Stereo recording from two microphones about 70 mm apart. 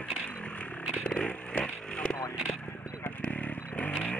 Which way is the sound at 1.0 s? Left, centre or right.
Centre.